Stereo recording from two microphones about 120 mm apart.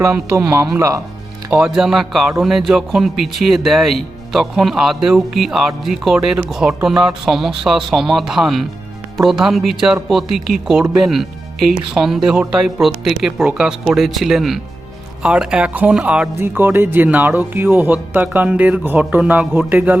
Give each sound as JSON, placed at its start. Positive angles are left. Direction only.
{"t": 0.8, "sound": "speech", "side_deg": -25}
{"t": 1.5, "sound": "speech", "side_deg": -5}